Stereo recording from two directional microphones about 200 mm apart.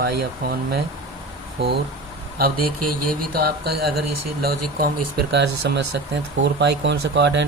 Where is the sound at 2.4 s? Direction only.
45° right (ahead or behind).